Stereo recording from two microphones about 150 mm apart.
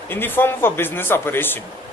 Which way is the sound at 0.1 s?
15° left (ahead or behind).